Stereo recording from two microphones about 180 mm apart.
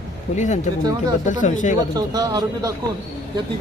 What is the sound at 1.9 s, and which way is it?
Speech, 20° right (ahead or behind).